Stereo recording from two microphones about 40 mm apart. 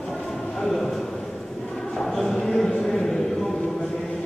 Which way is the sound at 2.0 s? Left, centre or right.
Centre.